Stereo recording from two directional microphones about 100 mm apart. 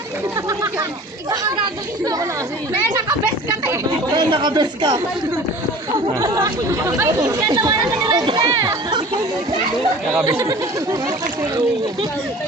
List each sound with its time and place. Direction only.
0.4 s a sound: 35° right (ahead or behind)
4.1 s speech: 50° right (ahead or behind)
6.1 s speech: 35° right (ahead or behind)
10.3 s speech: 35° right (ahead or behind)